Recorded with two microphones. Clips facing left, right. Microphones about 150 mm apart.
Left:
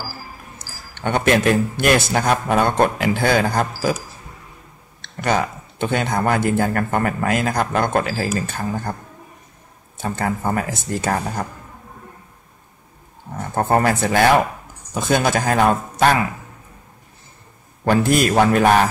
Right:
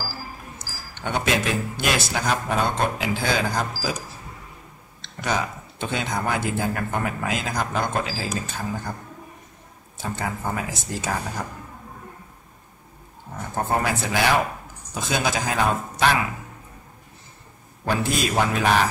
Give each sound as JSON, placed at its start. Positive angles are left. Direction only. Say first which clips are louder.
{"t": 0.9, "sound": "speech", "louder": "left 6 dB", "side_deg": 60}
{"t": 5.0, "sound": "speech", "louder": "left 6 dB", "side_deg": 60}
{"t": 9.9, "sound": "speech", "louder": "left 6 dB", "side_deg": 55}
{"t": 13.6, "sound": "speech", "louder": "left 6 dB", "side_deg": 55}
{"t": 17.8, "sound": "speech", "louder": "left 7 dB", "side_deg": 60}